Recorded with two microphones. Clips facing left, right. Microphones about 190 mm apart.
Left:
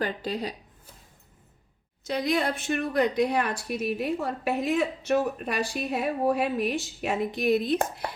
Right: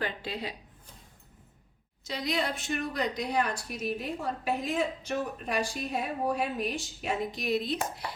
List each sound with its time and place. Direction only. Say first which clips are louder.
0.0 s speech: left 5 dB; 40° left (ahead or behind)
2.0 s a woman's voice: left 5 dB; 50° left (ahead or behind)